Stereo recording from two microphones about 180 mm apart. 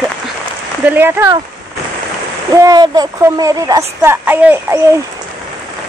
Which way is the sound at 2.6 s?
20° right (ahead or behind).